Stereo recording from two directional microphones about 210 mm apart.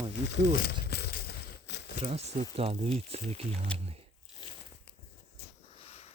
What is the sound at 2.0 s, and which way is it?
Speech, 30° right (ahead or behind).